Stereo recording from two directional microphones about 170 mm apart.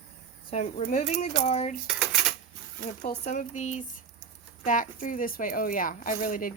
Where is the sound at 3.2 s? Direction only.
45° left (ahead or behind).